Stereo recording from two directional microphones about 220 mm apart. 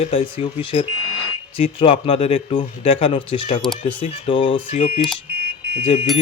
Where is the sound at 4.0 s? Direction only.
25° left (ahead or behind).